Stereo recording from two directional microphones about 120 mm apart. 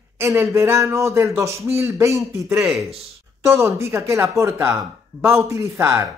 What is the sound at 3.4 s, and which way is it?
Speech, 25° right (ahead or behind).